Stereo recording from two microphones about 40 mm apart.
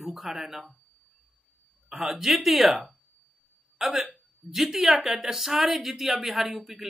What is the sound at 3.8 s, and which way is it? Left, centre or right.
A man's voice, centre.